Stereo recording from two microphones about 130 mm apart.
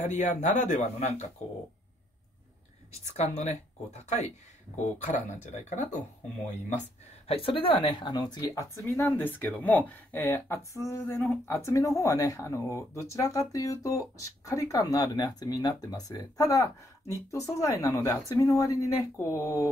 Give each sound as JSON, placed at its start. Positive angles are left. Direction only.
{"t": 0.0, "sound": "speech", "side_deg": 65}
{"t": 2.9, "sound": "speech", "side_deg": 55}
{"t": 4.9, "sound": "speech", "side_deg": 70}
{"t": 7.2, "sound": "speech", "side_deg": 45}